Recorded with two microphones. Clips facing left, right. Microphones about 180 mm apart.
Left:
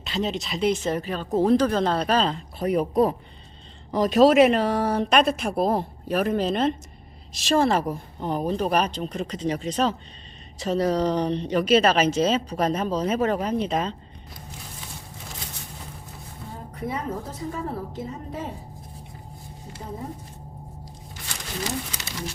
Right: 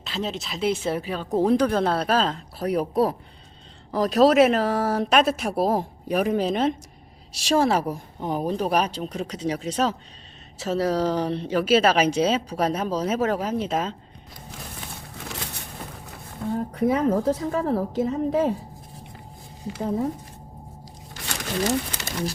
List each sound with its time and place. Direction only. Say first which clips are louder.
0.0 s speech: left 2 dB; centre (ahead or behind)
16.7 s a woman's voice: right 8 dB; 90° right
19.6 s speech: right 11 dB; 90° right
21.6 s speech: right 6 dB; 55° right (ahead or behind)